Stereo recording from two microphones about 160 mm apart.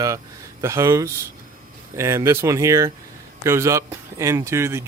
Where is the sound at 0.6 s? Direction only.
15° right (ahead or behind).